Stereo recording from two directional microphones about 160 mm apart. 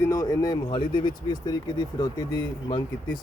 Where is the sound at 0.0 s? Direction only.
20° left (ahead or behind).